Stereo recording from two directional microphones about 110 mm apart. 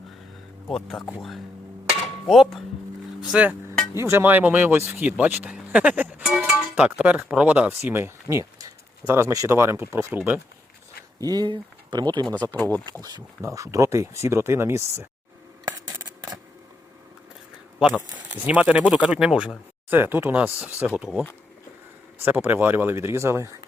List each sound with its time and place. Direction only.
0.7 s music: centre (ahead or behind)
2.2 s music: centre (ahead or behind)
3.2 s speech: 5° right (ahead or behind)
3.9 s speech: 25° right (ahead or behind)
7.7 s speech: 20° right (ahead or behind)
11.2 s speech: 35° right (ahead or behind)
12.2 s speech: 15° left (ahead or behind)
13.4 s speech: 30° right (ahead or behind)
17.7 s speech: 10° right (ahead or behind)
19.9 s speech: 20° right (ahead or behind)